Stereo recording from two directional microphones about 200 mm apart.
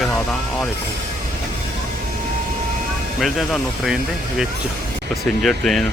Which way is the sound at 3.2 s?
Centre (ahead or behind).